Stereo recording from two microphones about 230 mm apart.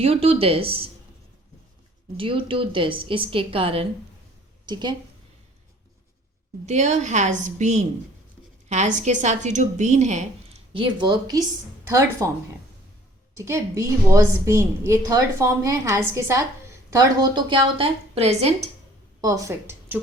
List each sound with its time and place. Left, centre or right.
0.0 s a woman's voice: right
2.1 s a woman's voice: right
6.7 s a woman's voice: right; by 12.3 s centre
13.3 s a woman's voice: centre
19.2 s a woman's voice: centre